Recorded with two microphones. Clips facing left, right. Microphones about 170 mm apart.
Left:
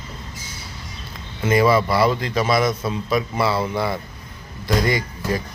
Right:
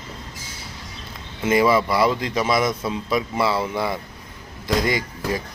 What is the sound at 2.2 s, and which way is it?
Speech, 20° right (ahead or behind).